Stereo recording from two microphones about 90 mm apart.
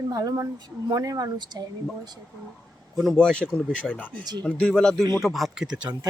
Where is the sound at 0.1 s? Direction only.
40° right (ahead or behind).